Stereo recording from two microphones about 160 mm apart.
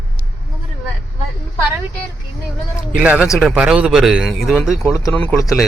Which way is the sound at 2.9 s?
10° right (ahead or behind).